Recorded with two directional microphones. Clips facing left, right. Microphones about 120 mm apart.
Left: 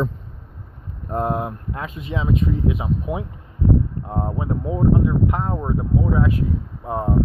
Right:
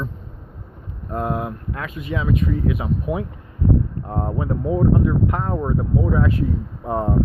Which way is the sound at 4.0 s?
5° left (ahead or behind).